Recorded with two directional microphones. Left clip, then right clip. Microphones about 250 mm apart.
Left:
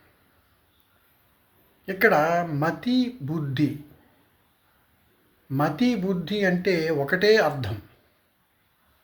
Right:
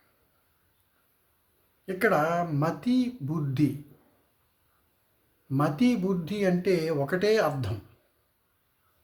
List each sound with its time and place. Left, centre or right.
1.9 s speech: centre
5.5 s speech: centre